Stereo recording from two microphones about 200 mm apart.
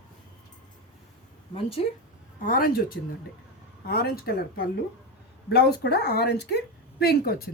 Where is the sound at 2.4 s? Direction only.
45° left (ahead or behind).